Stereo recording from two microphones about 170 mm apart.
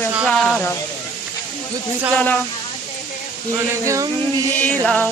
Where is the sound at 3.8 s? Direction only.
20° right (ahead or behind).